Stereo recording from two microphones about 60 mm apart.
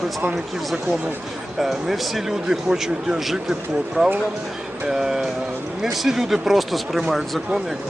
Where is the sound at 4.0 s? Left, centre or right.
Centre.